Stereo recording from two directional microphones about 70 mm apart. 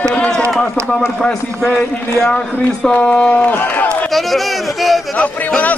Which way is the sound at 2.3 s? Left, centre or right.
Centre.